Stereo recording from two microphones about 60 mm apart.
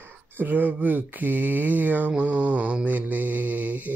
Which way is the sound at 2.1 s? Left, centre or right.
Right.